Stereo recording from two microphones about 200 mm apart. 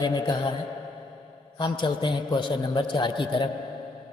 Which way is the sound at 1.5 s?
25° left (ahead or behind).